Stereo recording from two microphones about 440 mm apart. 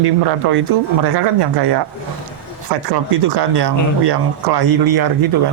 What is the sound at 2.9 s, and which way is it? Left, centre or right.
Speech, right.